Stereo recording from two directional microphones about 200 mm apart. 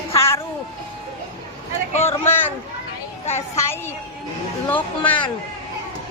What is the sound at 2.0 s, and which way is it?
Speech, 10° left (ahead or behind).